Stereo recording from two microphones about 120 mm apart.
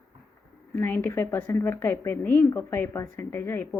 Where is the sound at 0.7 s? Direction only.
20° left (ahead or behind).